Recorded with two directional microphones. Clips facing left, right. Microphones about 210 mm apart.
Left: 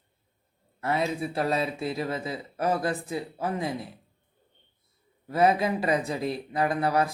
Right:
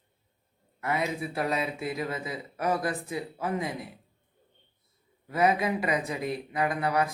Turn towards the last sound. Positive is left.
turn(degrees=30)  # may be behind; listen again after turning